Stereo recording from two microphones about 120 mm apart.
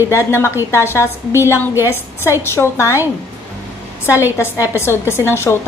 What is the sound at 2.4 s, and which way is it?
Speech, 20° left (ahead or behind).